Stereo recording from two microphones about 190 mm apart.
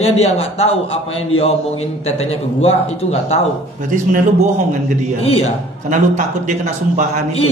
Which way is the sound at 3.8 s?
45° right (ahead or behind).